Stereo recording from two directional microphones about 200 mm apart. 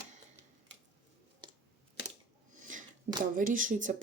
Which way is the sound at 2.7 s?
40° right (ahead or behind).